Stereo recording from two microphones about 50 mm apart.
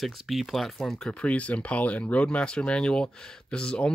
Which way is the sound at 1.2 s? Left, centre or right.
Left.